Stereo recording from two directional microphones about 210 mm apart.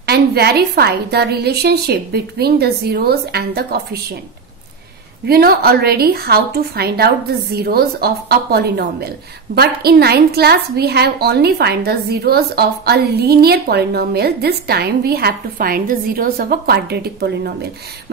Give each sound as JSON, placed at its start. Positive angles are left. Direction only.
{"t": 0.0, "sound": "a woman's voice", "side_deg": -50}
{"t": 5.2, "sound": "a woman's voice", "side_deg": -45}